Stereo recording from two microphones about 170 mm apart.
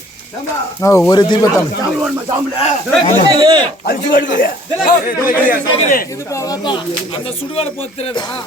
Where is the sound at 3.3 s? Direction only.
25° right (ahead or behind).